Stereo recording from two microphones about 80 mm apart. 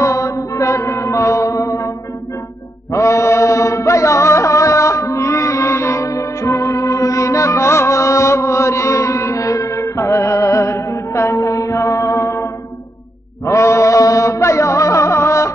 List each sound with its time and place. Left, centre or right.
0.0 s music: left
2.9 s music: left
13.5 s music: left